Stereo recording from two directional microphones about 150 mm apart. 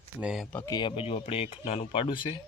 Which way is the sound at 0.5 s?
20° left (ahead or behind).